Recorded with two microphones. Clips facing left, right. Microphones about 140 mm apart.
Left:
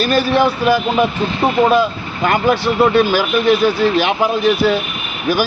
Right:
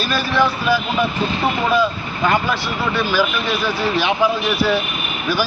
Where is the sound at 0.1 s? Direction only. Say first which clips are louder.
Left 2 dB; 50° left (ahead or behind).